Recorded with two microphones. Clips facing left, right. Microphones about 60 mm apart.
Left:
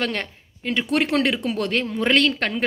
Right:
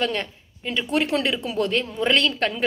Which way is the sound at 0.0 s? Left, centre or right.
Left.